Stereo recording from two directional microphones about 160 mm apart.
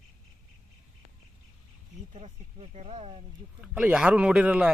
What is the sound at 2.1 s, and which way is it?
Speech, 45° right (ahead or behind).